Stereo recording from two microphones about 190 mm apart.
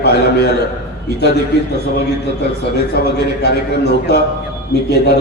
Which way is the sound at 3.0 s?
55° left (ahead or behind).